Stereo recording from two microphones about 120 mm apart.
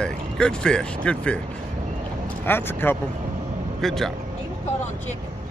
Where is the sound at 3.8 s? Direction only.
Centre (ahead or behind).